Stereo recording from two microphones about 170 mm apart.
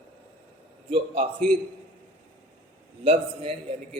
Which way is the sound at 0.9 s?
35° right (ahead or behind).